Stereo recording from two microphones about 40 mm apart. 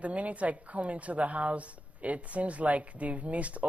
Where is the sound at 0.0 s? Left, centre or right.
Right.